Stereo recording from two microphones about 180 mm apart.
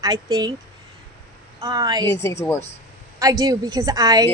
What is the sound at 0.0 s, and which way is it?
Speech, 20° right (ahead or behind).